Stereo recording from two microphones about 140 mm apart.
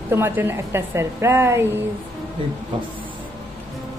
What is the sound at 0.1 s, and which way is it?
A woman's voice, 15° right (ahead or behind).